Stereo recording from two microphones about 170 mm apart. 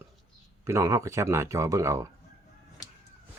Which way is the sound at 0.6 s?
15° right (ahead or behind).